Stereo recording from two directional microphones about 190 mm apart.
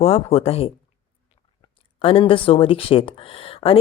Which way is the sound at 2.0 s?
30° left (ahead or behind).